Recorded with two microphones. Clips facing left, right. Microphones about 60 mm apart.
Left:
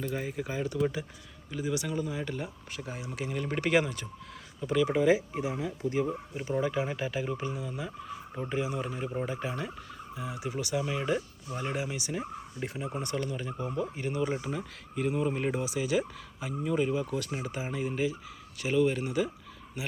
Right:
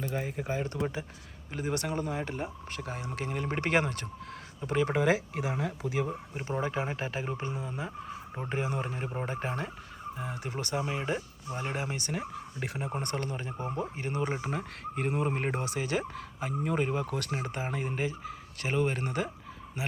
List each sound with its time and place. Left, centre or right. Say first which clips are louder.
0.1 s speech: right 1 dB; right
2.7 s speech: even; right
3.2 s speech: left 1 dB; right
3.7 s speech: left 2 dB; right
4.9 s speech: left 2 dB; right
6.6 s speech: left 2 dB; right
8.4 s speech: even; right
10.8 s speech: left 2 dB; right
14.4 s speech: right 1 dB; right
17.3 s speech: even; right